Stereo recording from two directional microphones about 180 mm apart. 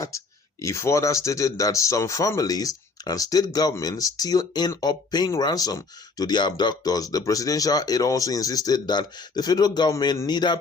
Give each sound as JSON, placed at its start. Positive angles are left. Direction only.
{"t": 0.6, "sound": "speech", "side_deg": 15}